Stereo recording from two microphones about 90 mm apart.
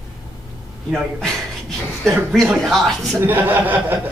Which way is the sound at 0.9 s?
5° left (ahead or behind).